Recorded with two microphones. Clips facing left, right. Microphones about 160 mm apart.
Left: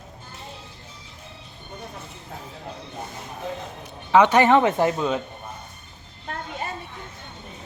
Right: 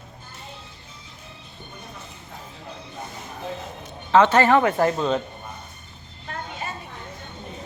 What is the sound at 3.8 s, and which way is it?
Speech, 15° left (ahead or behind).